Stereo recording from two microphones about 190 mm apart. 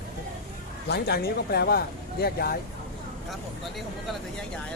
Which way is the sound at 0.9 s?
60° left (ahead or behind).